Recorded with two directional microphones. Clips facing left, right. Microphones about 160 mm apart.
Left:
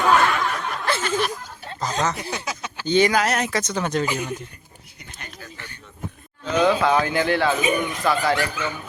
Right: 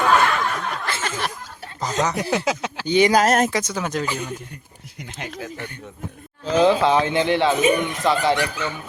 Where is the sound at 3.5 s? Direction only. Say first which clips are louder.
Left 1 dB; 10° right (ahead or behind).